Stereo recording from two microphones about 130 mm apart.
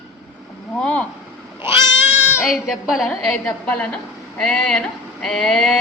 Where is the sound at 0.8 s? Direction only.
5° left (ahead or behind).